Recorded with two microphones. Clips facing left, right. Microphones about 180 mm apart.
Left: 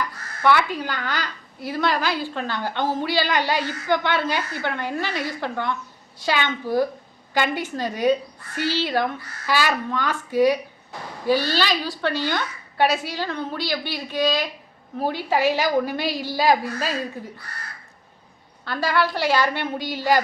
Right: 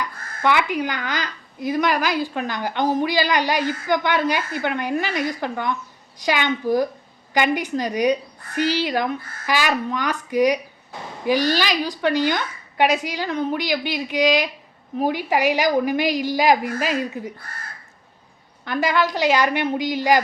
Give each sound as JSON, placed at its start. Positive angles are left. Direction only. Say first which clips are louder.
{"t": 0.4, "sound": "a woman's voice", "louder": "even", "side_deg": -15}
{"t": 18.6, "sound": "a woman's voice", "louder": "right 2 dB", "side_deg": -20}